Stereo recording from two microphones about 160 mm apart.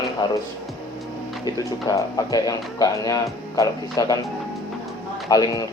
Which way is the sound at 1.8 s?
20° left (ahead or behind).